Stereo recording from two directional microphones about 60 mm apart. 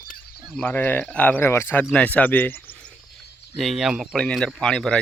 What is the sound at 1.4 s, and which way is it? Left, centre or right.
Speech, left.